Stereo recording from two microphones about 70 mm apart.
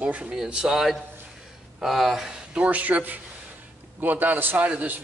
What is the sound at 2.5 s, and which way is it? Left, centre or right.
Speech, centre.